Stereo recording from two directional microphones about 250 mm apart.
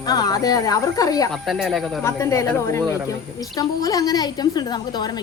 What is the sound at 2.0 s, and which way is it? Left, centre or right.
A woman's voice, centre.